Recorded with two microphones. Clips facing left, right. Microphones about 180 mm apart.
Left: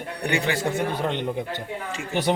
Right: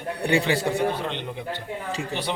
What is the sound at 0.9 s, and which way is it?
Speech, 45° left (ahead or behind).